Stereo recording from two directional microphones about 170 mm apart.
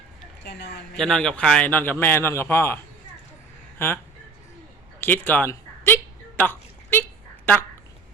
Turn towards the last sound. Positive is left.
turn(degrees=10)  # may be behind; listen again after turning